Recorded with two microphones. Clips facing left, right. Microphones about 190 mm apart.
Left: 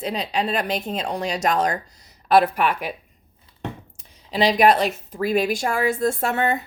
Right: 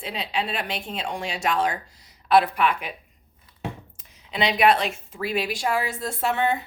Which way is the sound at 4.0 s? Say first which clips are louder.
Left 5 dB; 35° left (ahead or behind).